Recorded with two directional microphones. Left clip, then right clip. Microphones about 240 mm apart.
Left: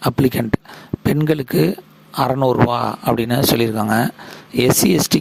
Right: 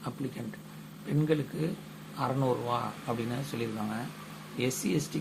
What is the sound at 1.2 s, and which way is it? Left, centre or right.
Speech, left.